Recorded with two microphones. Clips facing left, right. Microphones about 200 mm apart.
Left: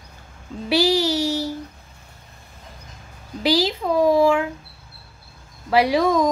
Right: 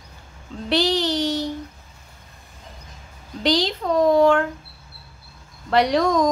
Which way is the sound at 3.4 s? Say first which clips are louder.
Left 1 dB; 5° left (ahead or behind).